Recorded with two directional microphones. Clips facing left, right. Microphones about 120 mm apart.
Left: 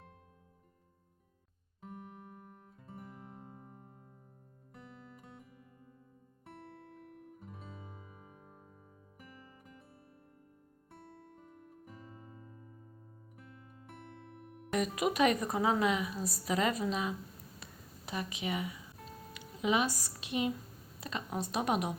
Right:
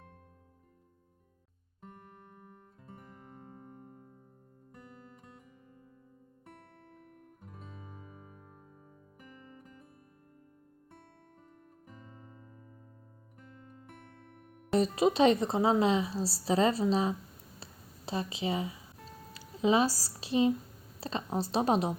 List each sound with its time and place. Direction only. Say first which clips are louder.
1.8 s music: left 4 dB; centre (ahead or behind)
10.9 s music: left 5 dB; centre (ahead or behind)
14.7 s speech: right 6 dB; 30° right (ahead or behind)
17.6 s a sound: right 1 dB; 30° right (ahead or behind)
19.3 s speech: right 5 dB; 30° right (ahead or behind)